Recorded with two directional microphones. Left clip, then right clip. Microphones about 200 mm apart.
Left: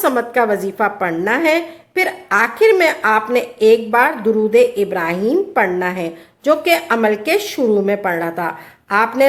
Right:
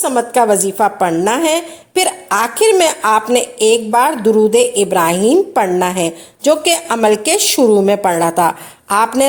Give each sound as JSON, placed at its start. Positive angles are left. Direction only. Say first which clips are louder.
{"t": 0.0, "sound": "a woman's voice", "louder": "right 2 dB", "side_deg": -25}